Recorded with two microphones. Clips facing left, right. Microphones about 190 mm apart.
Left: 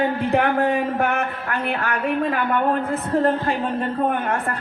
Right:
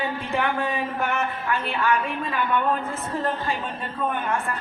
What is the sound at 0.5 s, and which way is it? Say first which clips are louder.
A woman's voice: left 6 dB; 65° left (ahead or behind).